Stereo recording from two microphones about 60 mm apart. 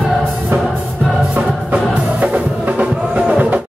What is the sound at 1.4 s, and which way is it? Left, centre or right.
Music, right.